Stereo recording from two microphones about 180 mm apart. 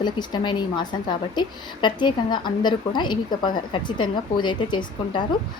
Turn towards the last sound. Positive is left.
turn(degrees=25)  # may be behind; listen again after turning